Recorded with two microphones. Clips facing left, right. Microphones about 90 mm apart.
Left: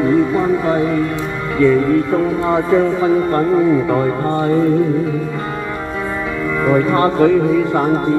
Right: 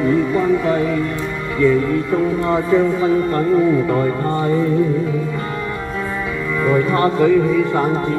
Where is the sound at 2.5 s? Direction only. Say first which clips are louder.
Left 2 dB; 20° left (ahead or behind).